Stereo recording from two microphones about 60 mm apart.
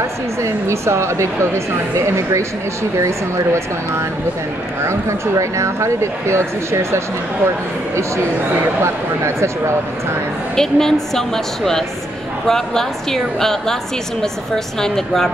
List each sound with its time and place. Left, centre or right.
0.0 s speech: right
8.8 s speech: right
10.5 s speech: centre